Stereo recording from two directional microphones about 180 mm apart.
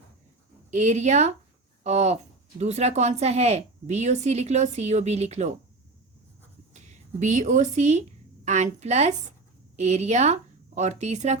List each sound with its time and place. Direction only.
0.7 s a woman's voice: 40° right (ahead or behind)
6.7 s a woman's voice: 40° right (ahead or behind)